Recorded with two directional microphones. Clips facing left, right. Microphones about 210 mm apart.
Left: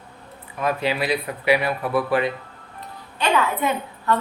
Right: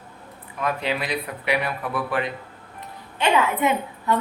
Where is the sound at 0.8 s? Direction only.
5° left (ahead or behind).